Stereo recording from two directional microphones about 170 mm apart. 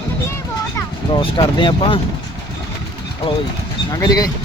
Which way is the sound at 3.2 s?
35° left (ahead or behind).